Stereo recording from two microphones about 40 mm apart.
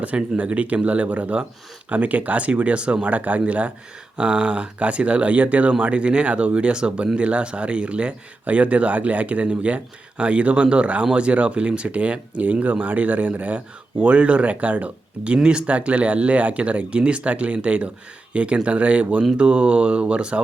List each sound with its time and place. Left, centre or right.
0.3 s speech: right